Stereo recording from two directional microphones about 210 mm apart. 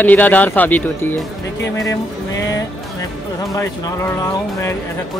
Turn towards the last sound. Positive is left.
turn(degrees=15)  # may be behind; listen again after turning